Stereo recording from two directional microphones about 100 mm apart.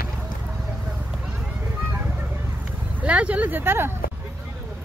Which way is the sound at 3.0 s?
15° right (ahead or behind).